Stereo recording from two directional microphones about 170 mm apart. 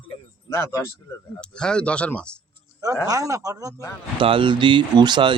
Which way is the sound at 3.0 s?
20° right (ahead or behind).